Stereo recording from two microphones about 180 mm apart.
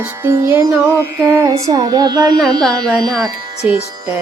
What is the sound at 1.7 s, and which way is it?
Speech, 20° right (ahead or behind).